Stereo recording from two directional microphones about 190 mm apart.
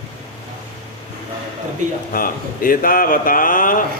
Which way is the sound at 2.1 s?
45° left (ahead or behind).